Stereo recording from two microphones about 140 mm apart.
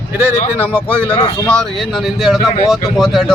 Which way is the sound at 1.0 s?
40° left (ahead or behind).